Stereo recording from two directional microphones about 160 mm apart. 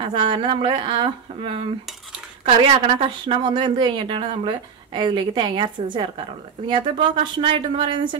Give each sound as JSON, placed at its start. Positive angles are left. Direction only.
{"t": 0.0, "sound": "a woman's voice", "side_deg": -30}